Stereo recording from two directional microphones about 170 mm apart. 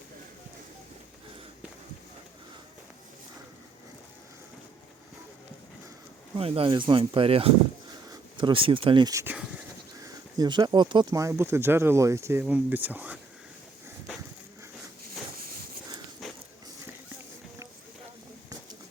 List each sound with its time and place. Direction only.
6.3 s speech: 35° right (ahead or behind)
10.3 s speech: 25° right (ahead or behind)
15.4 s a sound: 60° right (ahead or behind)
16.2 s biting: centre (ahead or behind)